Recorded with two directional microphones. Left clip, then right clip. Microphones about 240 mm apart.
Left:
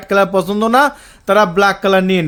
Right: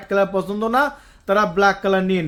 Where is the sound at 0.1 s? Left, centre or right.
Left.